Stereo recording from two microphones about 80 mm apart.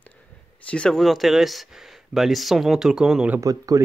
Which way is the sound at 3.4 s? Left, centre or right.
Right.